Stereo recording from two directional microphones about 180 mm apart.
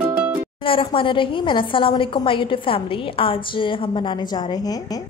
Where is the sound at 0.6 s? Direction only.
30° left (ahead or behind).